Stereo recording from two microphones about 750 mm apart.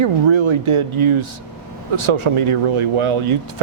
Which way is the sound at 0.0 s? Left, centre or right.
Right.